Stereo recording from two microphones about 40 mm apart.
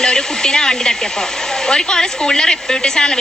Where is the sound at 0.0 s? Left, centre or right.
Centre.